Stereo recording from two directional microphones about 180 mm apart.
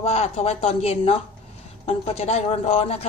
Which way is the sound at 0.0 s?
35° left (ahead or behind).